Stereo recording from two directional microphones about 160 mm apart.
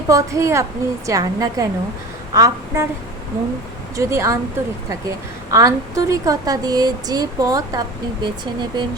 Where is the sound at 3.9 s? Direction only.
20° right (ahead or behind).